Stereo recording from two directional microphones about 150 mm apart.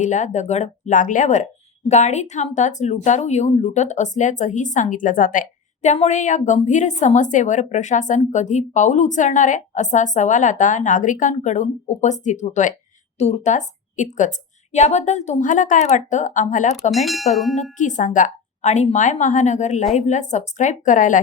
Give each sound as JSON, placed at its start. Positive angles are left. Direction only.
{"t": 0.0, "sound": "a woman's voice", "side_deg": 55}
{"t": 16.9, "sound": "speech", "side_deg": 0}
{"t": 17.6, "sound": "a woman's voice", "side_deg": 55}